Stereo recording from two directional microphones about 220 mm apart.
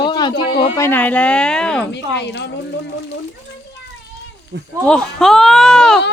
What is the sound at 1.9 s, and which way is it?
Speech, 50° left (ahead or behind).